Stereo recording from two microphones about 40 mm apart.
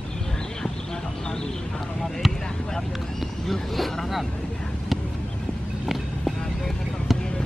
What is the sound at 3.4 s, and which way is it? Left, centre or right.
Vehicle, centre.